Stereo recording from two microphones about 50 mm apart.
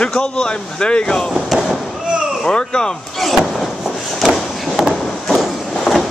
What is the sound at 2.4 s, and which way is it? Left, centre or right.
Speech, centre.